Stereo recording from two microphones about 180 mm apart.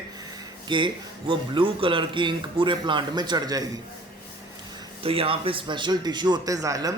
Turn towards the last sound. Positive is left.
turn(degrees=-20)  # may be behind; listen again after turning